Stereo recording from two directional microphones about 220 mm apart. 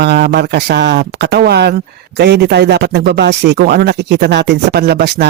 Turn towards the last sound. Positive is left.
turn(degrees=-50)  # may be behind; listen again after turning